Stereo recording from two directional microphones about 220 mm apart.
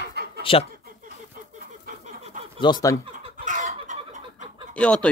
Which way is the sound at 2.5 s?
20° left (ahead or behind).